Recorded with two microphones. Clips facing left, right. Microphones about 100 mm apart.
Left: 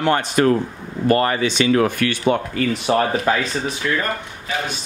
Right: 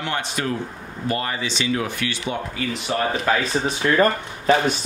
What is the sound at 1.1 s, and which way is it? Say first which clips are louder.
Speech: left 8 dB; 55° left (ahead or behind).